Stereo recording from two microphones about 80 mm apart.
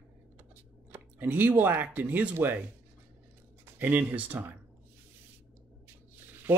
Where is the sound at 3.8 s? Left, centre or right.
Right.